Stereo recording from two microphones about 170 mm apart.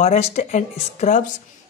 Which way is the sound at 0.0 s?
40° left (ahead or behind).